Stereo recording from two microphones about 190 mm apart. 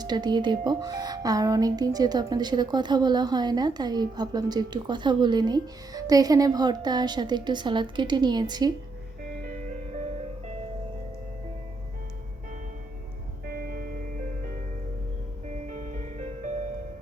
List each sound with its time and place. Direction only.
0.0 s speech: 20° right (ahead or behind)
9.4 s music: 45° right (ahead or behind)
13.4 s music: 50° right (ahead or behind)
15.6 s music: 40° right (ahead or behind)